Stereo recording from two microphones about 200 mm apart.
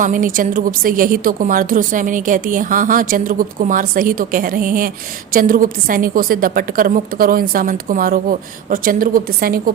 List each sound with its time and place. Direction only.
0.0 s speech: 40° right (ahead or behind)